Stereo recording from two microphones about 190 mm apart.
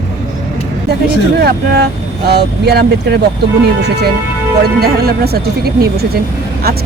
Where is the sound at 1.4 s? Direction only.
55° right (ahead or behind).